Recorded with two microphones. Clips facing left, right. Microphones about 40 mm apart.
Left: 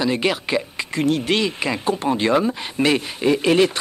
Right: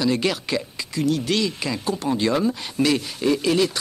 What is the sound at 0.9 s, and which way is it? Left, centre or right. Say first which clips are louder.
Speech: left 2 dB; left.